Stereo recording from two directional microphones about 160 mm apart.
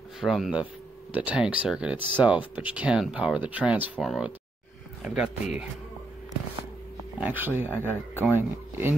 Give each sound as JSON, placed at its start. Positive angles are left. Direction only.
{"t": 0.2, "sound": "speech", "side_deg": 0}
{"t": 7.2, "sound": "speech", "side_deg": -10}